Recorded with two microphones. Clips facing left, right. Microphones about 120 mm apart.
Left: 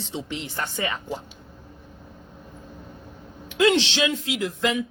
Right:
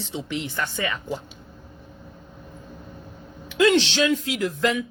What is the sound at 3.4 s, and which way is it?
Speech, 25° left (ahead or behind).